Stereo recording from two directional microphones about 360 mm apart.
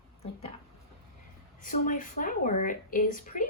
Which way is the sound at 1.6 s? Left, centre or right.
Left.